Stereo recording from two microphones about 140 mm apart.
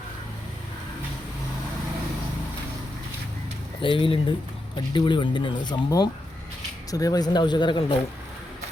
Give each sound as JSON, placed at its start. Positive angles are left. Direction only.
{"t": 3.8, "sound": "speech", "side_deg": 35}